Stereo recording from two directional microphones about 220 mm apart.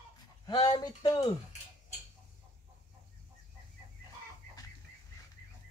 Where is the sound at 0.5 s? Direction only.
20° left (ahead or behind).